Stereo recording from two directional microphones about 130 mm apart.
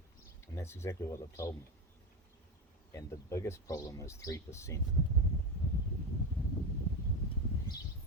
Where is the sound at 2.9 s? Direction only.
25° left (ahead or behind).